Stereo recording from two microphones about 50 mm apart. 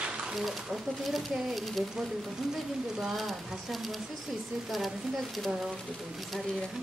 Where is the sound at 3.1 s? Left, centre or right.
Centre.